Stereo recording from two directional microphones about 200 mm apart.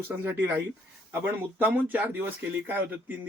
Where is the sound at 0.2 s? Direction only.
10° right (ahead or behind).